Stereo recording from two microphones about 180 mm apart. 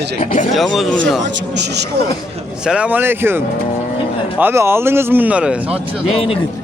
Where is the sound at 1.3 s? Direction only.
75° right (ahead or behind).